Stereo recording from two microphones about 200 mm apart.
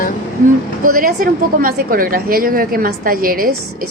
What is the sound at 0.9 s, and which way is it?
A woman's voice, 45° right (ahead or behind).